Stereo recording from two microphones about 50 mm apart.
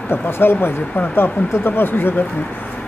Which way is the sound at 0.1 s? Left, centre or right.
Left.